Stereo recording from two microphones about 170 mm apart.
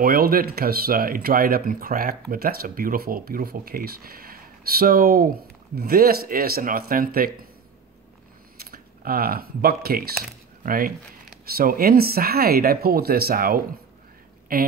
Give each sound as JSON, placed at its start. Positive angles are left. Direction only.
{"t": 0.0, "sound": "speech", "side_deg": -60}
{"t": 8.5, "sound": "speech", "side_deg": -60}